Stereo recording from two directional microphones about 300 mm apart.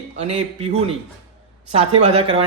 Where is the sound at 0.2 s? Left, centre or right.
Centre.